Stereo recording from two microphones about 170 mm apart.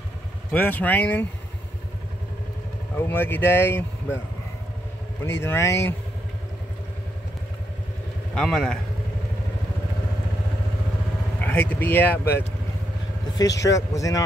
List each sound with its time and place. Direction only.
0.5 s speech: 10° left (ahead or behind)
3.0 s speech: 10° left (ahead or behind)
5.2 s speech: 15° left (ahead or behind)
8.4 s speech: 5° left (ahead or behind)
11.4 s speech: 10° left (ahead or behind)
13.7 s speech: 20° left (ahead or behind)